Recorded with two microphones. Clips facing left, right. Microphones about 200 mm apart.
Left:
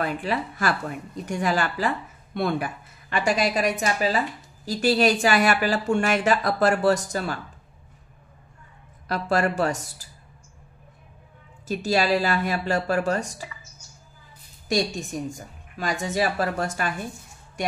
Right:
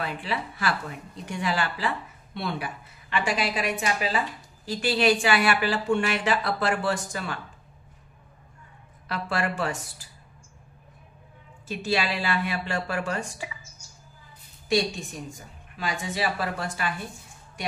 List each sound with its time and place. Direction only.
0.0 s speech: 45° left (ahead or behind)
9.0 s speech: 40° left (ahead or behind)
11.6 s speech: 40° left (ahead or behind)
14.7 s speech: 45° left (ahead or behind)